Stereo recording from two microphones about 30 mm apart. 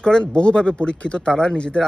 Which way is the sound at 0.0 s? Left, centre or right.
Left.